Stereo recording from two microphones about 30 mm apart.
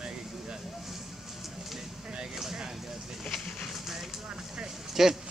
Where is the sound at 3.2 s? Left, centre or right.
Centre.